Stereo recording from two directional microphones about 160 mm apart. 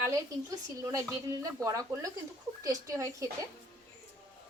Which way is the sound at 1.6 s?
20° right (ahead or behind).